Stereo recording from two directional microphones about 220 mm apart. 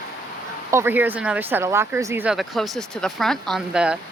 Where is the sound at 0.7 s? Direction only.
10° right (ahead or behind).